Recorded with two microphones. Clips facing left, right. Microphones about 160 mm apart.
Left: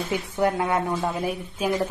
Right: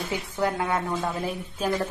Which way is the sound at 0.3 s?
20° left (ahead or behind).